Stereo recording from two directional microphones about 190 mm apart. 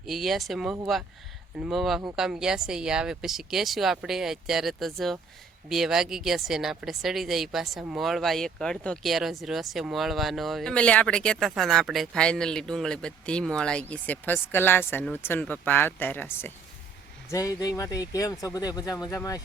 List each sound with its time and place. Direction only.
0.0 s speech: centre (ahead or behind); by 19.4 s 20° left (ahead or behind)